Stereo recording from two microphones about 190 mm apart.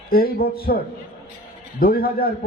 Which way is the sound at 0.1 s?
50° left (ahead or behind).